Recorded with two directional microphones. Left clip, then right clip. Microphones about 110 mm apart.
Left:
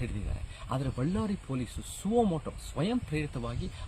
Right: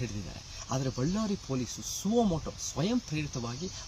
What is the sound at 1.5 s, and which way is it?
Speech, 30° left (ahead or behind).